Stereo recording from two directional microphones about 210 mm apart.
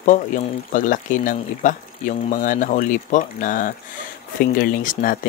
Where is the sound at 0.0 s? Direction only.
40° left (ahead or behind).